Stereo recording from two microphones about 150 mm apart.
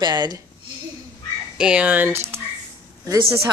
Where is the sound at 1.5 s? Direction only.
5° right (ahead or behind).